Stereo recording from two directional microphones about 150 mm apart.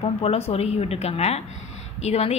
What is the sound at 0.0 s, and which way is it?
A woman's voice, 40° left (ahead or behind).